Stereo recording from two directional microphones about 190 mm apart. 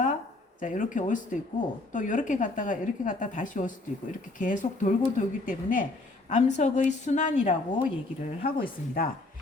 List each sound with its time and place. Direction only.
0.6 s a woman's voice: 45° left (ahead or behind)